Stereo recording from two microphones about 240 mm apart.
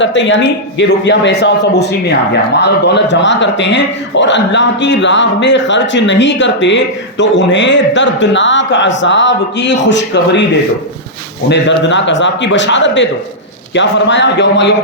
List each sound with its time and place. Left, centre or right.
0.0 s a man's voice: left
11.8 s a man's voice: left